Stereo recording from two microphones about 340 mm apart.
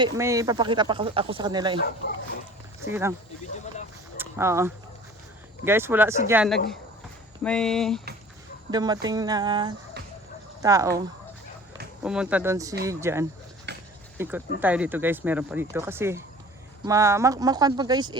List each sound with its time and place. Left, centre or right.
0.0 s speech: centre
2.0 s speech: left
2.8 s speech: centre
3.4 s speech: left
4.2 s speech: centre
8.7 s speech: centre
12.0 s speech: centre
13.7 s a sound: right
14.2 s speech: centre